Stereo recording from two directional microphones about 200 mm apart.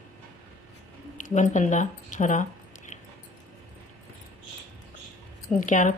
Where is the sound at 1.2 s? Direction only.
40° left (ahead or behind).